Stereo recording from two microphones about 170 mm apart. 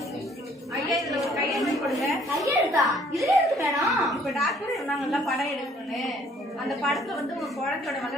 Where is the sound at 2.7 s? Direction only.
Centre (ahead or behind).